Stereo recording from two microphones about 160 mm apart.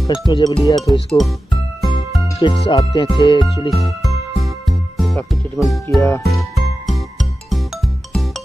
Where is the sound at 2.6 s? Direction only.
30° left (ahead or behind).